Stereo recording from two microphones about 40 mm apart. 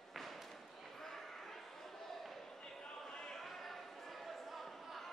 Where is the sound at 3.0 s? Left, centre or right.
Centre.